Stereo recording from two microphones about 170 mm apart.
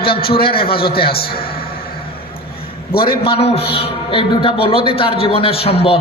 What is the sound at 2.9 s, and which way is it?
Speech, 60° left (ahead or behind).